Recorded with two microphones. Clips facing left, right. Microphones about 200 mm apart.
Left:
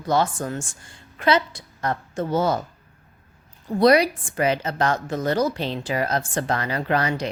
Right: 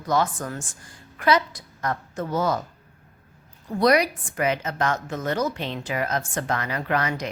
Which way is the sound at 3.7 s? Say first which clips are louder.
Left 3 dB; 30° left (ahead or behind).